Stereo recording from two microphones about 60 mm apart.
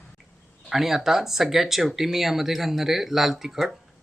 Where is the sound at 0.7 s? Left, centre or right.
Centre.